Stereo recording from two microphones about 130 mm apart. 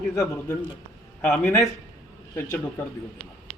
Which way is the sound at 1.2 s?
5° left (ahead or behind).